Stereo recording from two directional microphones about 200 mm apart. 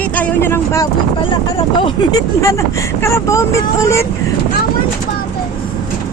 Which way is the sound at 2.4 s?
15° left (ahead or behind).